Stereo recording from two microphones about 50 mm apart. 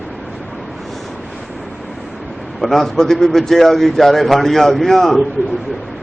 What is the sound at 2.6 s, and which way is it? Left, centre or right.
A man's voice, centre.